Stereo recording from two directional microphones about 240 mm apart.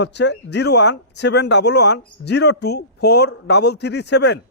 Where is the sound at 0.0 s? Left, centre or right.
Left.